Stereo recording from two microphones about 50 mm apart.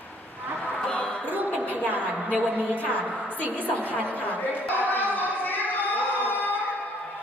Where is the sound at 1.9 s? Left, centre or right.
Right.